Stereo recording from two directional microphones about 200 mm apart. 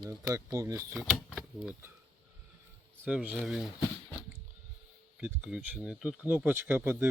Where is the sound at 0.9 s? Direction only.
Centre (ahead or behind).